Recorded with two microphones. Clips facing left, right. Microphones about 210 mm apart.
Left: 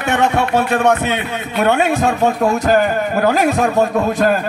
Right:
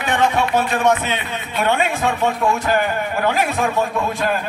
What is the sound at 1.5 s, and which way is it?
A man's voice, 40° left (ahead or behind).